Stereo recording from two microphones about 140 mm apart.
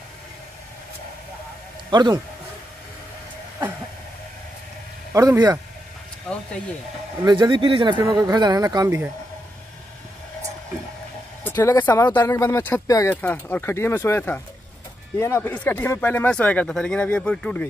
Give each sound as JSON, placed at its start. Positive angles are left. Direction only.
{"t": 1.9, "sound": "a man's voice", "side_deg": -30}
{"t": 5.1, "sound": "speech", "side_deg": -25}
{"t": 7.2, "sound": "speech", "side_deg": -35}
{"t": 11.5, "sound": "speech", "side_deg": 25}
{"t": 11.8, "sound": "speech", "side_deg": 15}
{"t": 13.1, "sound": "speech", "side_deg": 10}